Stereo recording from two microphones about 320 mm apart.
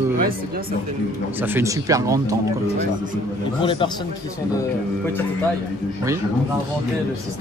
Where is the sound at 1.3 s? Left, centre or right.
Centre.